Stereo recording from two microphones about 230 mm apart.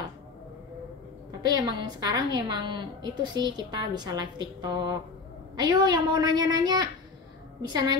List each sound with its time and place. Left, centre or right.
1.4 s a woman's voice: centre